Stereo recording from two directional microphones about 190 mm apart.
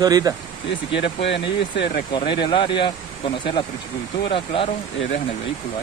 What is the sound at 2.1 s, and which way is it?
Speech, 25° left (ahead or behind).